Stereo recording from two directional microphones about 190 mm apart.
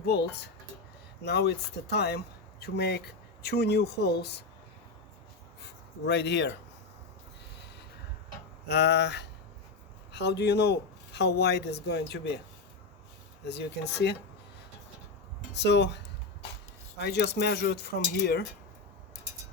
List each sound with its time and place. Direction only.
0.0 s speech: 60° left (ahead or behind)
5.6 s speech: 65° left (ahead or behind)
8.6 s speech: 60° left (ahead or behind)
13.4 s speech: 60° left (ahead or behind)
15.5 s speech: 65° left (ahead or behind)
17.0 s speech: 60° left (ahead or behind)